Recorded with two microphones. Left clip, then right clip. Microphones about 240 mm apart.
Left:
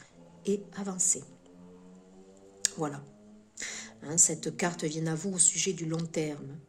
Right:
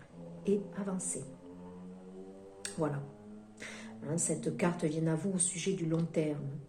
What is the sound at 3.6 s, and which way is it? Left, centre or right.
Speech, left.